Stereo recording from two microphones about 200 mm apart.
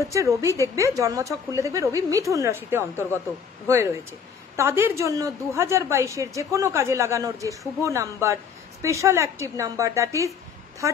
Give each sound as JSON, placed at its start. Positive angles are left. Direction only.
{"t": 0.4, "sound": "a woman's voice", "side_deg": -15}